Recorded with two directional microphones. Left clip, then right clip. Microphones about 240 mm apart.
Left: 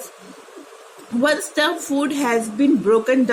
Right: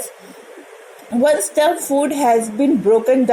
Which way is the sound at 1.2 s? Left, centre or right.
Centre.